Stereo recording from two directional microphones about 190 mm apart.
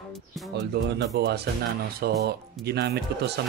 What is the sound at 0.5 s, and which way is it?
Speech, 65° right (ahead or behind).